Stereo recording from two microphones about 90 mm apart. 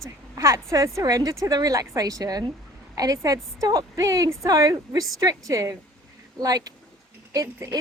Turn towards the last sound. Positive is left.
turn(degrees=-45)  # may be behind; listen again after turning